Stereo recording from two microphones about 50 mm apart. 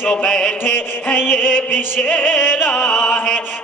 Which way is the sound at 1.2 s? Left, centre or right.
Left.